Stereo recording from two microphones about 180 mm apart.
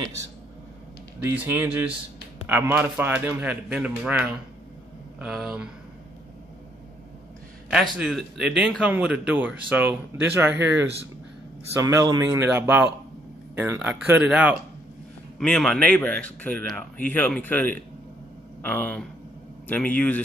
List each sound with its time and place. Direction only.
1.2 s a man's voice: 10° right (ahead or behind)
5.2 s speech: 5° right (ahead or behind)
7.7 s a man's voice: 5° right (ahead or behind)
15.3 s speech: 5° left (ahead or behind)